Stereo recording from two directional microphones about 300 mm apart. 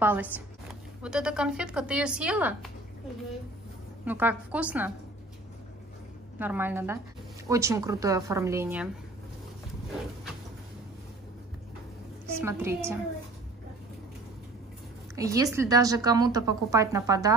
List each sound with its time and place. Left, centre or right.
0.0 s speech: centre
4.0 s speech: centre
6.3 s a woman's voice: centre
12.3 s a woman's voice: centre
15.1 s a woman's voice: centre